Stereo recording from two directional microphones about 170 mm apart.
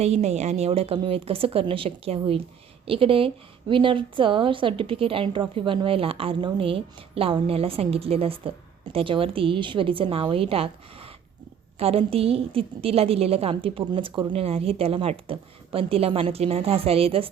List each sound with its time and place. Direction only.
0.0 s a woman's voice: 40° right (ahead or behind)